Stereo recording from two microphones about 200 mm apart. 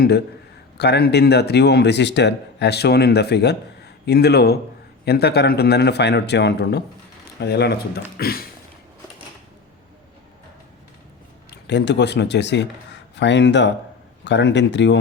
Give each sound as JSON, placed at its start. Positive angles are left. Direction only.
{"t": 0.8, "sound": "a man's voice", "side_deg": 55}
{"t": 8.2, "sound": "a sound", "side_deg": 50}
{"t": 11.5, "sound": "a man's voice", "side_deg": 60}